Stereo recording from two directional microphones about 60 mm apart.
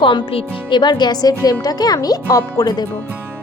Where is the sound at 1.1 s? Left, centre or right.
Left.